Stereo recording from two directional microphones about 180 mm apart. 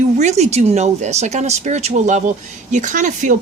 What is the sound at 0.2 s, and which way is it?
Speech, 40° right (ahead or behind).